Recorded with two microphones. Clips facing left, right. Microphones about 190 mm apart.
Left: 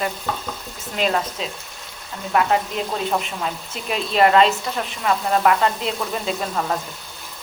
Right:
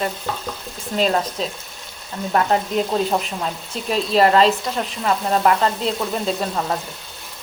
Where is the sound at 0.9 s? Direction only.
35° right (ahead or behind).